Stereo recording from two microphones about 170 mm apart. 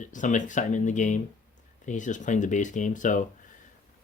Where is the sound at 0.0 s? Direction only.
50° left (ahead or behind).